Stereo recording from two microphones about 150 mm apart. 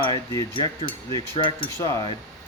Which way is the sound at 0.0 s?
30° left (ahead or behind).